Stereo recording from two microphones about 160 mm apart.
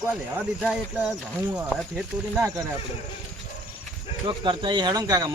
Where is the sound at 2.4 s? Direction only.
15° right (ahead or behind).